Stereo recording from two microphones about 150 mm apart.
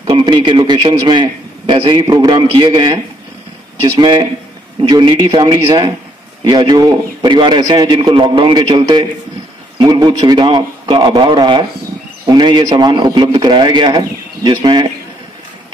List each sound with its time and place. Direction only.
0.0 s a man's voice: 30° right (ahead or behind)